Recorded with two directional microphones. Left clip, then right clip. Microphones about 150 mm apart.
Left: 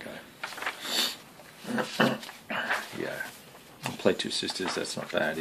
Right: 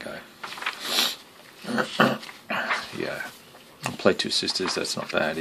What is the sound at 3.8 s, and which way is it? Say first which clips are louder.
Speech: right 5 dB; 30° right (ahead or behind).